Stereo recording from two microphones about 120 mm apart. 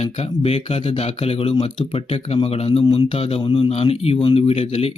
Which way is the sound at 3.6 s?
60° left (ahead or behind).